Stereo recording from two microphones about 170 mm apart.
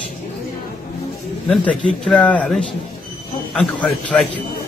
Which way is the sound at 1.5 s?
5° left (ahead or behind).